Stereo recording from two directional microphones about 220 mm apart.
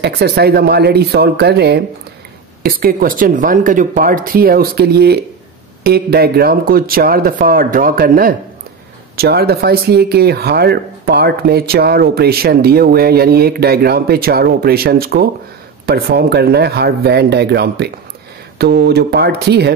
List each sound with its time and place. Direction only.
0.0 s speech: 45° right (ahead or behind)